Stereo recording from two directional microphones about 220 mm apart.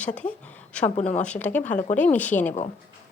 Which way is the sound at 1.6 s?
35° left (ahead or behind).